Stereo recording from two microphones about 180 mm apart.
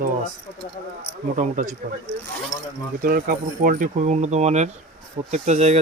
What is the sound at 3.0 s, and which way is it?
Speech, 50° right (ahead or behind).